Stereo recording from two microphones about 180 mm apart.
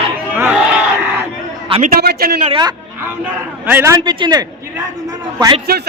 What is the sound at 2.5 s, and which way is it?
Speech, 25° right (ahead or behind).